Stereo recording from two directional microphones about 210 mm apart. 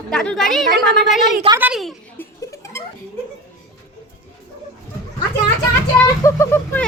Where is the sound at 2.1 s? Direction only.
15° left (ahead or behind).